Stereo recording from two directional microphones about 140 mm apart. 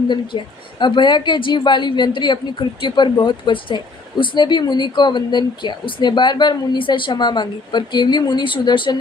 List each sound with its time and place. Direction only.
0.1 s a woman's voice: 35° left (ahead or behind)